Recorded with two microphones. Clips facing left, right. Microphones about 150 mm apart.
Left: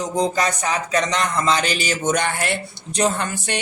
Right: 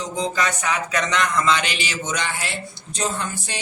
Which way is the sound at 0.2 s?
35° left (ahead or behind).